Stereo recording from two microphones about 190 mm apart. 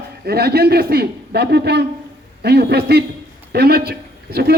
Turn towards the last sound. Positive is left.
turn(degrees=-55)  # may be behind; listen again after turning